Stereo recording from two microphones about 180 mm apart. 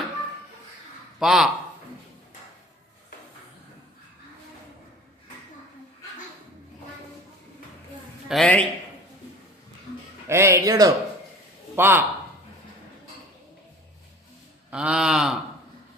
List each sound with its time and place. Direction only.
1.2 s a man's voice: centre (ahead or behind)
8.3 s a man's voice: 5° left (ahead or behind)
10.2 s speech: 15° right (ahead or behind)
14.7 s a sound: 5° right (ahead or behind)